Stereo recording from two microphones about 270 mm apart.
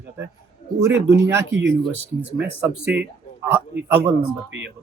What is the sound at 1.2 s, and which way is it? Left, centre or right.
Speech, centre.